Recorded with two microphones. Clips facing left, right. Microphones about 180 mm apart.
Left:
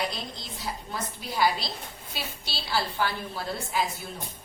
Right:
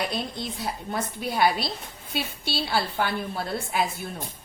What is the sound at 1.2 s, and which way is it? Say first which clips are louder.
A woman's voice: right 2 dB; 60° right (ahead or behind).